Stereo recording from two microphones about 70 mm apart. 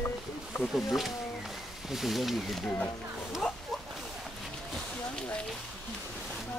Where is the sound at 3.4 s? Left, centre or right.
Centre.